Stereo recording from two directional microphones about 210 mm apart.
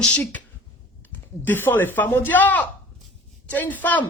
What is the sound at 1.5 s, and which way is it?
Speech, 10° left (ahead or behind).